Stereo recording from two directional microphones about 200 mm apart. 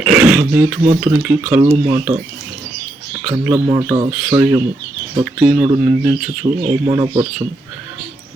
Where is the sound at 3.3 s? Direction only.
15° right (ahead or behind).